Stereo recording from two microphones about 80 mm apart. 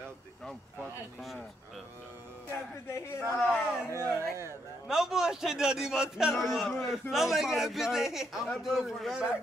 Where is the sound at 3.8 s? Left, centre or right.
Left.